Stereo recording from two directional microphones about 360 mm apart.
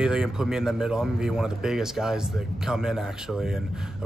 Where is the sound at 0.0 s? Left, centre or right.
Centre.